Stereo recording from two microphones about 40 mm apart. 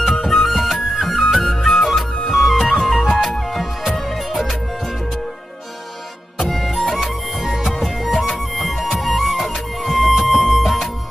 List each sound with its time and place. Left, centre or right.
0.0 s music: centre
6.4 s music: centre